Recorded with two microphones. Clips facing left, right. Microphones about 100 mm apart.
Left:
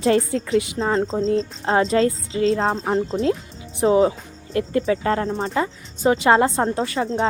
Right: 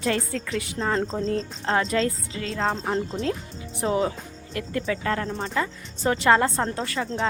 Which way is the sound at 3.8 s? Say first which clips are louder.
Left 8 dB; 25° left (ahead or behind).